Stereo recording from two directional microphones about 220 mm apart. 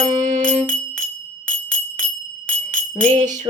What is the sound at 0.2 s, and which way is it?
Music, 30° right (ahead or behind).